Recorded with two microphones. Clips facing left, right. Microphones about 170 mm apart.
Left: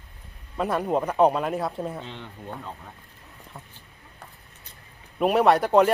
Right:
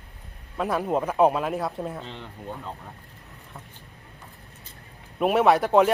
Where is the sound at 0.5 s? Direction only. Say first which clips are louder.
Even; centre (ahead or behind).